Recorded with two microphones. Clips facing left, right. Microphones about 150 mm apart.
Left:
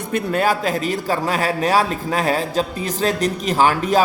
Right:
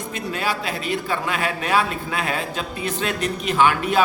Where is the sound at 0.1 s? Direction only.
50° left (ahead or behind).